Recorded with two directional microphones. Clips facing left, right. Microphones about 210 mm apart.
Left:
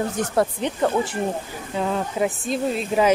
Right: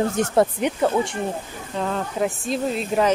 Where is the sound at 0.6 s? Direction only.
10° right (ahead or behind).